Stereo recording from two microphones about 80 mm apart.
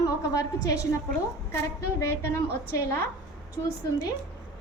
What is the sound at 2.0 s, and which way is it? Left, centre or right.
Speech, left.